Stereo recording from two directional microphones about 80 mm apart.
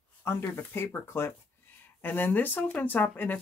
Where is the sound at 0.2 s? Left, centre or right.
Left.